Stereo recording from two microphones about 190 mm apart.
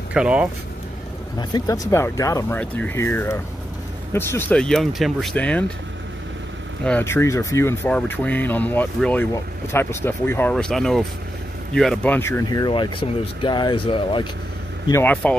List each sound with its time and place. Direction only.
0.1 s speech: 5° right (ahead or behind)
1.4 s speech: 20° left (ahead or behind)
6.8 s speech: 10° left (ahead or behind); by 14.2 s 25° left (ahead or behind)
14.9 s speech: 10° left (ahead or behind)